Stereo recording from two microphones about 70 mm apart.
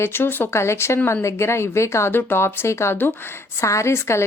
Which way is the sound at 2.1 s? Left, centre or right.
Left.